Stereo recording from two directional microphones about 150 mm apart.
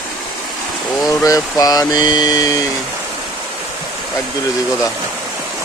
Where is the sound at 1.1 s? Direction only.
25° left (ahead or behind).